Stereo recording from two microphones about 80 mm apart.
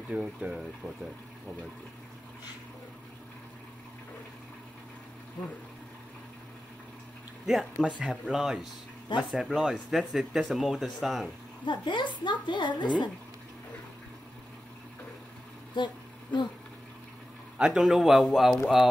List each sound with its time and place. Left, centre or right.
0.1 s speech: centre
7.4 s speech: centre
11.6 s a woman's voice: left
15.7 s vehicle: left
17.6 s speech: centre